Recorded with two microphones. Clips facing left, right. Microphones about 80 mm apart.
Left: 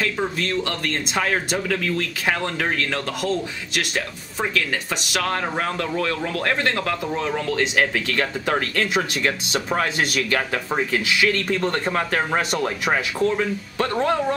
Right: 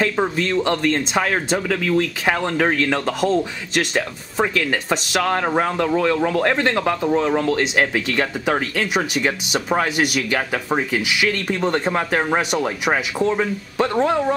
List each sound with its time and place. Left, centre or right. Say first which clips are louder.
0.0 s speech: right 4 dB; right
1.1 s speech: right 3 dB; centre; by 5.2 s right
5.2 s speech: right 4 dB; centre